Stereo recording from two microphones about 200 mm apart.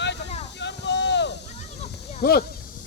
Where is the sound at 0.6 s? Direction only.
60° left (ahead or behind).